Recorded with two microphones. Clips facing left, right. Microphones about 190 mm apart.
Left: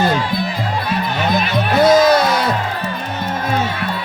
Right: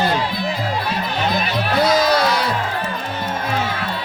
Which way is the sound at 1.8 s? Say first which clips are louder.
Left 5 dB; 50° left (ahead or behind).